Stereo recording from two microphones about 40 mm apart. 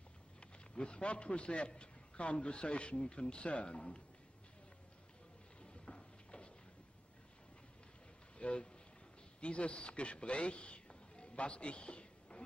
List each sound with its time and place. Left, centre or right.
0.4 s a man's voice: left
5.6 s a sound: left
8.4 s a man's voice: left